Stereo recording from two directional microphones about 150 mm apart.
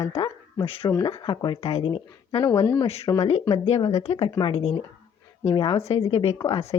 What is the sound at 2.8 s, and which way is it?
A woman's voice, 45° left (ahead or behind).